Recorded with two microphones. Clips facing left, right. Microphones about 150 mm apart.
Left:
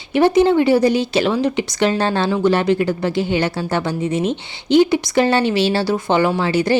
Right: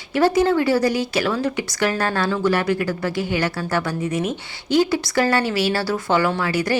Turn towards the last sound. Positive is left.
turn(degrees=25)  # may be behind; listen again after turning